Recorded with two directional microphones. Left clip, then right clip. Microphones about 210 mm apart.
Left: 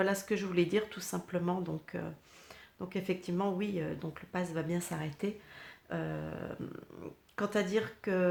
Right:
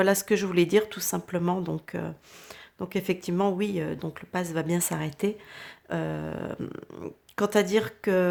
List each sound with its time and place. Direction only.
0.0 s speech: 40° right (ahead or behind)